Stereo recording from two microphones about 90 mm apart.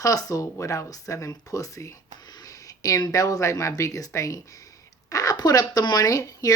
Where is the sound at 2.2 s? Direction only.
50° left (ahead or behind).